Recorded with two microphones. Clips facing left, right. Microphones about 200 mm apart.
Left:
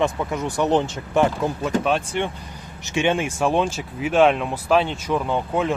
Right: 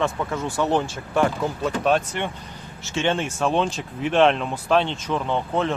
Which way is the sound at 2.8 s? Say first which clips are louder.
Left 2 dB; 15° left (ahead or behind).